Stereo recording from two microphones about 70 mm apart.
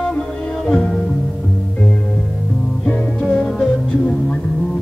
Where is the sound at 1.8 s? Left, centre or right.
Centre.